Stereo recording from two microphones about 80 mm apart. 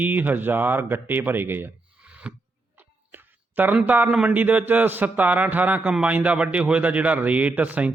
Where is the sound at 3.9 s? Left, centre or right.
Right.